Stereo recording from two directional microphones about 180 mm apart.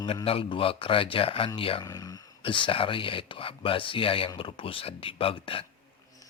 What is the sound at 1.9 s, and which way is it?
Speech, 20° left (ahead or behind).